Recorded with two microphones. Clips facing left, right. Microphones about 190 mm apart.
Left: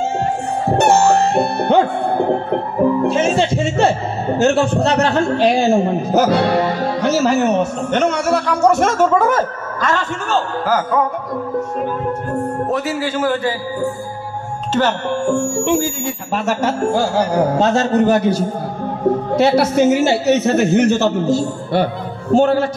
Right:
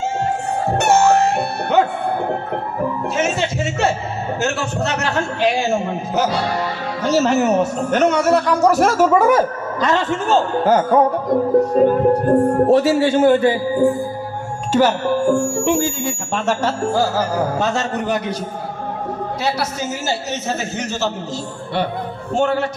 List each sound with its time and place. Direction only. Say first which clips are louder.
0.7 s music: left 2 dB; 30° left (ahead or behind)
3.1 s a man's voice: left 5 dB; 30° left (ahead or behind)
6.2 s a man's voice: left 6 dB; 60° left (ahead or behind)
7.2 s a man's voice: left 1 dB; 5° right (ahead or behind); by 13.8 s 20° right (ahead or behind)
14.7 s music: right 2 dB; 10° right (ahead or behind)
17.2 s a man's voice: left 4 dB; 15° left (ahead or behind)
17.7 s a man's voice: left 7 dB; 30° left (ahead or behind)
19.7 s a man's voice: left 11 dB; 60° left (ahead or behind); by 21.8 s 45° left (ahead or behind)
22.3 s a man's voice: left 5 dB; 35° left (ahead or behind)